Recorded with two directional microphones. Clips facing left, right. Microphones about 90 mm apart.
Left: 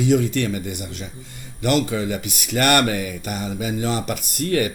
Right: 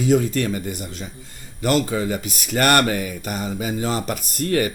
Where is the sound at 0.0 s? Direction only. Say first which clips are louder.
Even; 40° right (ahead or behind).